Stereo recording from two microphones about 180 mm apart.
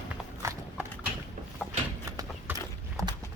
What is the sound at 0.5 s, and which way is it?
Clip-clop, 15° right (ahead or behind).